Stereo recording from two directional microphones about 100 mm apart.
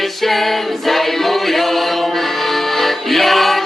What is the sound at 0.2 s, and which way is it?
Choir, centre (ahead or behind).